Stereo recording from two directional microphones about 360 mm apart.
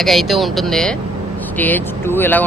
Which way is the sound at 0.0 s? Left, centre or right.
Centre.